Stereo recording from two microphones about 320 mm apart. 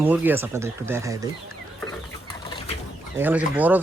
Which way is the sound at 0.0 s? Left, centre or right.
Centre.